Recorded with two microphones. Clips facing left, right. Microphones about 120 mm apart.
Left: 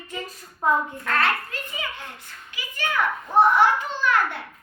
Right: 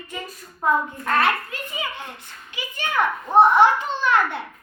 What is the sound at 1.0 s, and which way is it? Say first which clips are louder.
A child's voice: right 3 dB; 15° right (ahead or behind).